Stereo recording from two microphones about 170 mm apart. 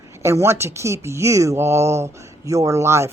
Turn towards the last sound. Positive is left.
turn(degrees=-15)  # may be behind; listen again after turning